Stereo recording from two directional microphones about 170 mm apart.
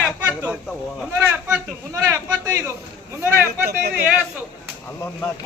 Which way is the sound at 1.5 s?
15° right (ahead or behind).